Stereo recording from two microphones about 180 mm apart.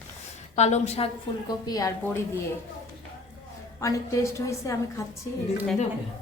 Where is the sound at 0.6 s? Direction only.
40° left (ahead or behind).